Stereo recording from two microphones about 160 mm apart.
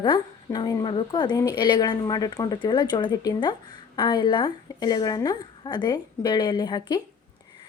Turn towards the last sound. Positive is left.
turn(degrees=25)  # may be behind; listen again after turning